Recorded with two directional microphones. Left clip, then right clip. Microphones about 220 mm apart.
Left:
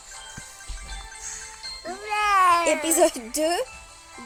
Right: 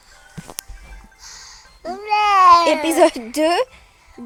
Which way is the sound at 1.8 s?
15° right (ahead or behind).